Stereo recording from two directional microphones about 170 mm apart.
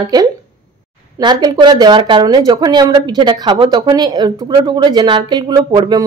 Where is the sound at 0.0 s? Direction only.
20° right (ahead or behind).